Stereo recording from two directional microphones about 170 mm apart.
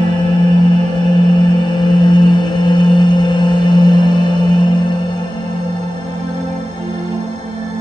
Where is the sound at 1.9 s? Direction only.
25° left (ahead or behind).